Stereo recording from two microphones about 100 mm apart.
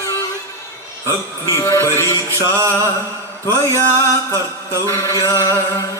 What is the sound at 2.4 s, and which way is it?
Music, 30° right (ahead or behind).